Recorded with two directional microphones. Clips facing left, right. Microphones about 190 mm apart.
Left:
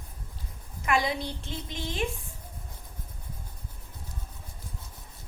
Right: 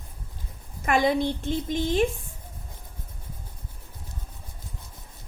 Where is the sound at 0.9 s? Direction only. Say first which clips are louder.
Right 6 dB; 50° right (ahead or behind).